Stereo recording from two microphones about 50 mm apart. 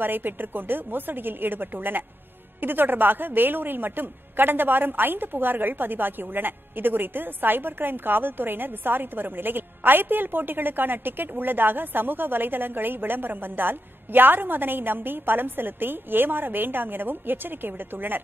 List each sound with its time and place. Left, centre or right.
0.0 s a woman's voice: right